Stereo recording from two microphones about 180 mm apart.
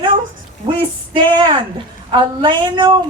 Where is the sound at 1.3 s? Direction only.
25° right (ahead or behind).